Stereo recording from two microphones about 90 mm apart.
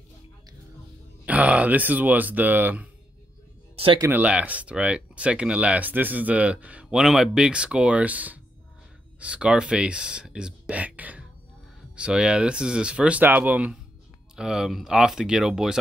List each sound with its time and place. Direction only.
1.2 s speech: 15° right (ahead or behind)
3.7 s a sound: 90° right
4.1 s speech: 15° right (ahead or behind)
14.3 s speech: 5° right (ahead or behind)